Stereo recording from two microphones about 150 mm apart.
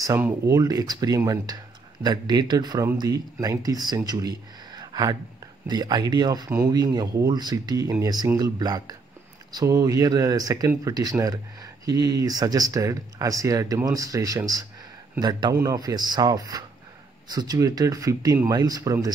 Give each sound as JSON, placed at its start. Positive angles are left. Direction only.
{"t": 0.0, "sound": "speech", "side_deg": -20}